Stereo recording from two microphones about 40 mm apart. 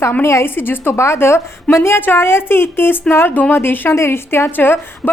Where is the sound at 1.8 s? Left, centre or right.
Left.